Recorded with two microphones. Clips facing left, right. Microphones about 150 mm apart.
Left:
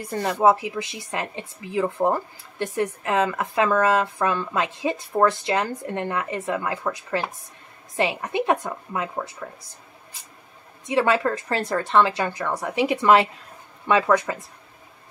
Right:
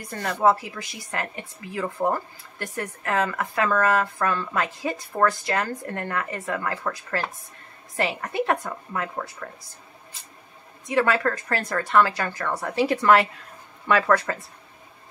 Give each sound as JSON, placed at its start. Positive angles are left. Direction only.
{"t": 0.2, "sound": "speech", "side_deg": 15}
{"t": 10.9, "sound": "speech", "side_deg": 20}